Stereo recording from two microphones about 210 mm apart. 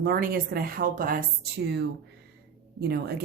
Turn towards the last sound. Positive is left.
turn(degrees=-50)  # may be behind; listen again after turning